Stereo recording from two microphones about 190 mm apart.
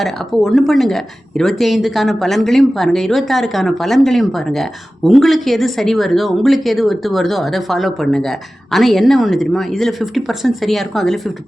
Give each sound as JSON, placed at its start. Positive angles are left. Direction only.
{"t": 0.0, "sound": "speech", "side_deg": 0}